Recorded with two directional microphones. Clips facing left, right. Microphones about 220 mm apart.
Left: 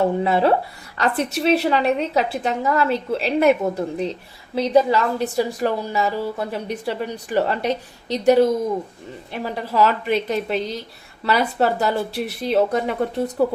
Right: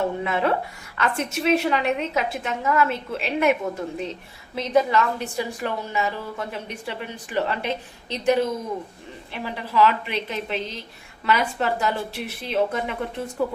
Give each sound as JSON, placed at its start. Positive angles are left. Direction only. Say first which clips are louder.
{"t": 0.2, "sound": "a woman's voice", "louder": "left 5 dB", "side_deg": 35}